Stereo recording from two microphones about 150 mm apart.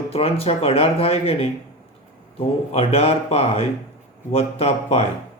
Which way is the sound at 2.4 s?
40° left (ahead or behind).